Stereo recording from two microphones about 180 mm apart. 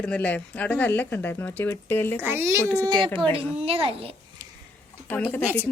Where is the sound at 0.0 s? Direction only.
5° left (ahead or behind).